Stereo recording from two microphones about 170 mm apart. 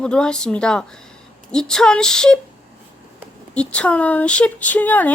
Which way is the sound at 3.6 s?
5° left (ahead or behind).